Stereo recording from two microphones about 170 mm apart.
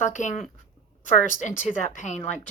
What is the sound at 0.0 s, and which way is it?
Speech, 45° left (ahead or behind).